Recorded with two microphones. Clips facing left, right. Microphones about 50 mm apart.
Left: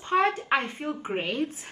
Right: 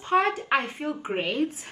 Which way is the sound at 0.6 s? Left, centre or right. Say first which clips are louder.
Right 1 dB; centre.